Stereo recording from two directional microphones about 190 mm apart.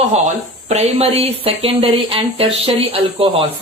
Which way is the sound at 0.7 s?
35° right (ahead or behind).